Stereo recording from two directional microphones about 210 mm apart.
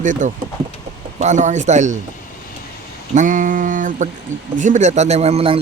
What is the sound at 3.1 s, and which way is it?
Speech, 40° right (ahead or behind).